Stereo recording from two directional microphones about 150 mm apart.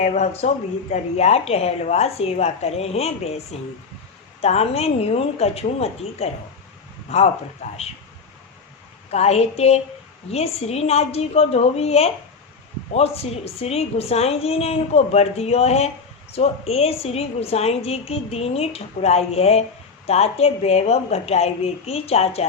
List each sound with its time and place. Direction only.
0.0 s a woman's voice: 50° left (ahead or behind)
9.0 s a woman's voice: 45° left (ahead or behind)